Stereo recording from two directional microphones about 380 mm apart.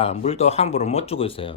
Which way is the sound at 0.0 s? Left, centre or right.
Centre.